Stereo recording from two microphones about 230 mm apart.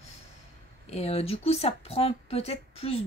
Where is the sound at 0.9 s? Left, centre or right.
Left.